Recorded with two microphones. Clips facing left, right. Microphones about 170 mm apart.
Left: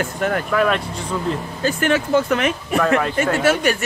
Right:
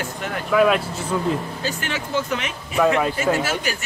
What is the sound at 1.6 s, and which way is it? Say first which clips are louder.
Speech: left 8 dB; 50° left (ahead or behind).